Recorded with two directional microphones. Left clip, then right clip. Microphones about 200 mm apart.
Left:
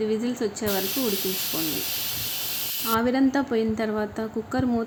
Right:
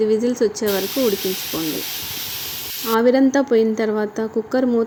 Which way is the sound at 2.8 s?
10° right (ahead or behind).